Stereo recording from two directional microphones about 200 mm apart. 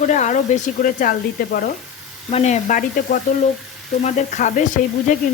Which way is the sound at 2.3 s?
35° left (ahead or behind).